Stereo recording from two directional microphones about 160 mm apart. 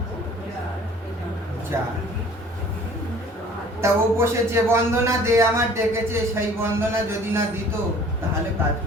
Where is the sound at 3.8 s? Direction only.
15° right (ahead or behind).